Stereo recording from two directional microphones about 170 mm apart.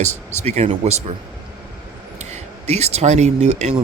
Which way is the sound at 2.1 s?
40° right (ahead or behind).